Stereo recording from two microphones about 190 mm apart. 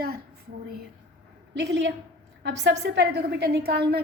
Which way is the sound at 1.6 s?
70° right (ahead or behind).